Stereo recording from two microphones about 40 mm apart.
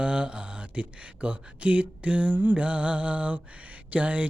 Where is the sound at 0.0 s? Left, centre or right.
Right.